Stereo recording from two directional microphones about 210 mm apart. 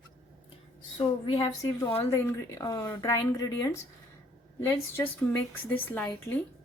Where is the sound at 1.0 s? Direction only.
20° left (ahead or behind).